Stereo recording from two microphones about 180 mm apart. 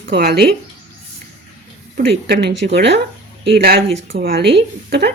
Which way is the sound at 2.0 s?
65° right (ahead or behind).